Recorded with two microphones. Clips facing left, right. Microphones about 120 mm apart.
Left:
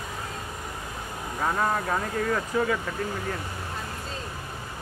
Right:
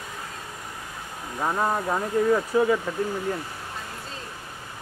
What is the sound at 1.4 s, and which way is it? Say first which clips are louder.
Speech: right 1 dB; 15° right (ahead or behind).